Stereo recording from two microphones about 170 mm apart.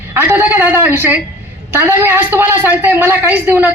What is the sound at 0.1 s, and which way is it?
A woman's voice, 10° right (ahead or behind).